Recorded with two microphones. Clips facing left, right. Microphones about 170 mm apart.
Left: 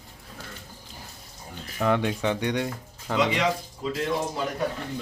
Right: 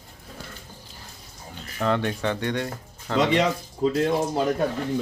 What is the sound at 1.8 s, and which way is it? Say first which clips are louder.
Speech: even; 10° left (ahead or behind).